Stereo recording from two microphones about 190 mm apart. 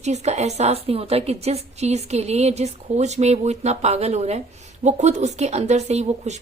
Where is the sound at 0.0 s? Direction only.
35° right (ahead or behind).